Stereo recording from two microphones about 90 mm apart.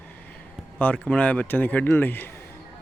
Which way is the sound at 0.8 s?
15° left (ahead or behind).